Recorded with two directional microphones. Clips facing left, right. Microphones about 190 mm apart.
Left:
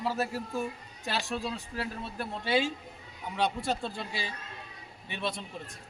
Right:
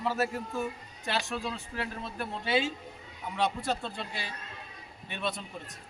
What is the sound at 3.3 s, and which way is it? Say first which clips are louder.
Speech: even; centre (ahead or behind).